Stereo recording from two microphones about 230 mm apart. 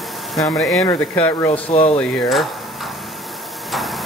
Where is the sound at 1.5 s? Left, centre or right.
Left.